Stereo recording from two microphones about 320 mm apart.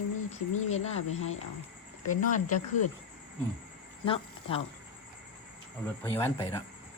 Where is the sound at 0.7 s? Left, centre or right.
Centre.